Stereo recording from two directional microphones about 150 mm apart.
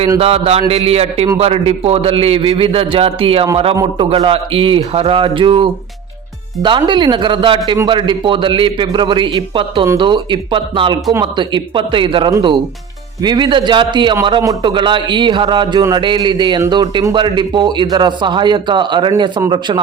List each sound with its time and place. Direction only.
0.2 s a man's voice: 40° right (ahead or behind)